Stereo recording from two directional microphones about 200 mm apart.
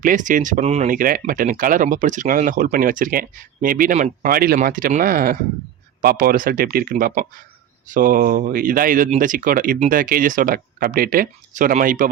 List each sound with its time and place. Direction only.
0.0 s speech: 40° right (ahead or behind)